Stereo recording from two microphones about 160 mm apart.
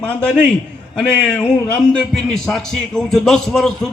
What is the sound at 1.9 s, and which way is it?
A man's voice, 5° left (ahead or behind).